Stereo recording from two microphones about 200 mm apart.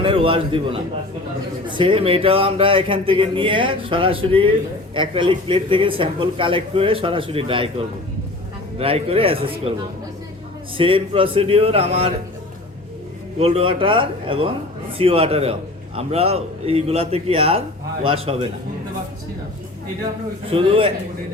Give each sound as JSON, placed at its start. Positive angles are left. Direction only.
{"t": 0.0, "sound": "speech", "side_deg": -25}
{"t": 8.8, "sound": "speech", "side_deg": -30}
{"t": 10.8, "sound": "speech", "side_deg": -25}
{"t": 13.4, "sound": "speech", "side_deg": -30}
{"t": 20.5, "sound": "speech", "side_deg": -25}